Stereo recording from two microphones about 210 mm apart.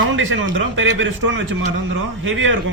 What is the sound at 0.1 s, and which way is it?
A man's voice, 65° right (ahead or behind).